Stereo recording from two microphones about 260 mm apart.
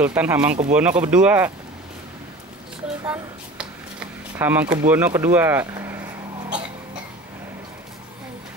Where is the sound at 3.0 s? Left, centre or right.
Centre.